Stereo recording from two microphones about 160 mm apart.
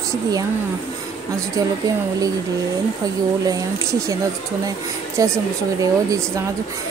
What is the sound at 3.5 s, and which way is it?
Speech, 20° right (ahead or behind).